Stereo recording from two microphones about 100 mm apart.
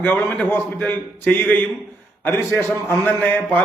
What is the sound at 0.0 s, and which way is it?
A man's voice, 20° left (ahead or behind).